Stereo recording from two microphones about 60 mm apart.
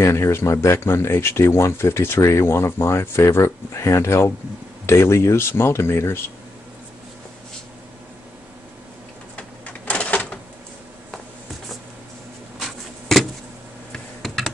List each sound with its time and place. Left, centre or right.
0.0 s speech: left
9.4 s printer: left
12.5 s a sound: centre
14.2 s computer keyboard: centre